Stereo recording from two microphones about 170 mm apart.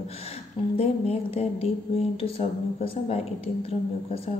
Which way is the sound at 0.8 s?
35° left (ahead or behind).